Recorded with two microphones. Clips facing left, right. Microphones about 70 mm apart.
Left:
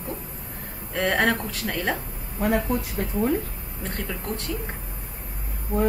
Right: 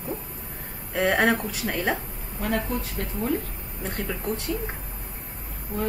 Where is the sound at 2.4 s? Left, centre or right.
Centre.